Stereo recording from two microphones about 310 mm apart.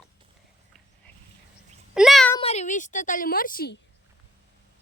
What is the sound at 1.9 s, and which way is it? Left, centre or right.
Speech, centre.